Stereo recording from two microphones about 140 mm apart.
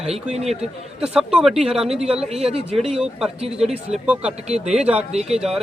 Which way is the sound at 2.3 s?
45° right (ahead or behind).